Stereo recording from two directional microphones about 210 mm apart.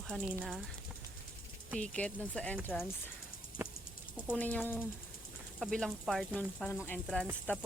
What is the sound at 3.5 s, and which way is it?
Music, 40° left (ahead or behind).